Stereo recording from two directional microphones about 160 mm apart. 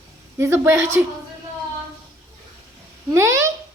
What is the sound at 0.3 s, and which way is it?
Speech, 15° right (ahead or behind).